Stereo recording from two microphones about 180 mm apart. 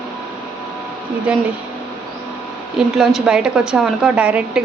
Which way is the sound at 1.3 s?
5° right (ahead or behind).